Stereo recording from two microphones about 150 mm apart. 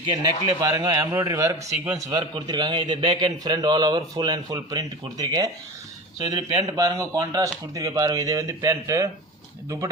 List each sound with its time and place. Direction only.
0.0 s a man's voice: 30° right (ahead or behind)
2.0 s a man's voice: 30° right (ahead or behind)